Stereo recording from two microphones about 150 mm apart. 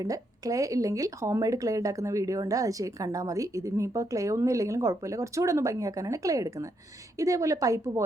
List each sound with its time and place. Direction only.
0.0 s speech: 25° right (ahead or behind)